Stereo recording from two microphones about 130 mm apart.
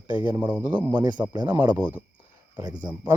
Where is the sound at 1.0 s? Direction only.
35° right (ahead or behind).